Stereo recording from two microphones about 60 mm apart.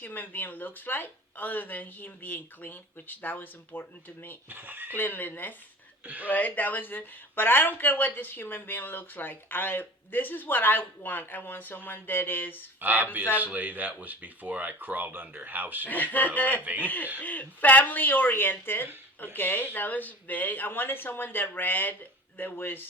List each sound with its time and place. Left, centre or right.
0.0 s speech: left
4.4 s speech: right
4.9 s speech: left
6.1 s speech: right
6.3 s speech: left
12.8 s speech: right
15.9 s speech: left
16.6 s speech: right
16.8 s speech: left